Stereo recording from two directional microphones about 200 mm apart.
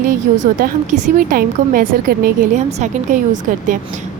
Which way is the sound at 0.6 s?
40° right (ahead or behind).